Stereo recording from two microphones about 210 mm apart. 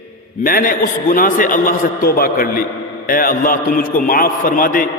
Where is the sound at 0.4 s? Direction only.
40° left (ahead or behind).